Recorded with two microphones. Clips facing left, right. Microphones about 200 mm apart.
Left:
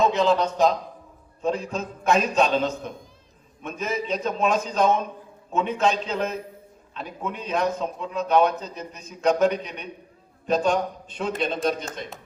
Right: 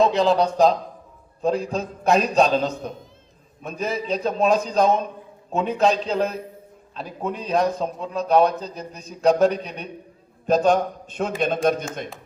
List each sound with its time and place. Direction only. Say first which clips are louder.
0.0 s a man's voice: right 2 dB; 35° right (ahead or behind); by 11.9 s 50° right (ahead or behind)